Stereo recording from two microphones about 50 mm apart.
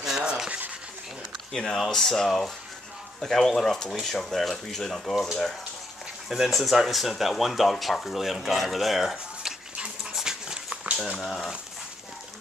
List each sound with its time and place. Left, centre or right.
0.2 s a sound: centre
1.5 s speech: centre
11.1 s speech: centre